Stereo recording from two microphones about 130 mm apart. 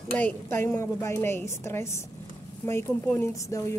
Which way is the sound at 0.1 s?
15° left (ahead or behind).